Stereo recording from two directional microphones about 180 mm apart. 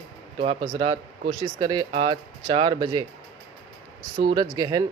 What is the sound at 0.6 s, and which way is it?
Speech, 25° right (ahead or behind).